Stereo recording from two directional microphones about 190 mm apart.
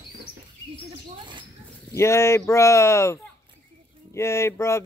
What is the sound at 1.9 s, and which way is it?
Speech, 15° left (ahead or behind).